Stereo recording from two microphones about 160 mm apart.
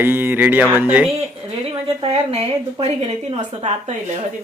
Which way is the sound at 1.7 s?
35° right (ahead or behind).